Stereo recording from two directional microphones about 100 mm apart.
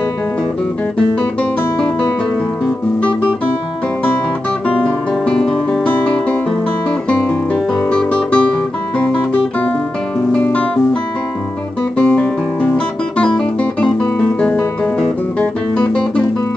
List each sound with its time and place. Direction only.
4.6 s guitar: 10° left (ahead or behind)
10.3 s music: 15° left (ahead or behind)
12.0 s guitar: 15° left (ahead or behind)
15.0 s music: 10° left (ahead or behind)